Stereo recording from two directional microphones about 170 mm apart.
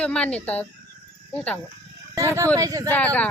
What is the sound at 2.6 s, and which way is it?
Speech, 20° right (ahead or behind).